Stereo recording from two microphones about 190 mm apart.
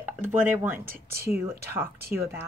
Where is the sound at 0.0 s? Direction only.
10° right (ahead or behind).